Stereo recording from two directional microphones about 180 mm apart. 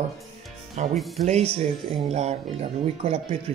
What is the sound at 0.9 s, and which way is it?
Speech, centre (ahead or behind).